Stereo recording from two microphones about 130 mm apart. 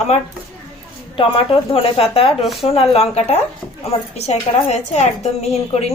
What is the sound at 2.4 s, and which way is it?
Speech, centre (ahead or behind).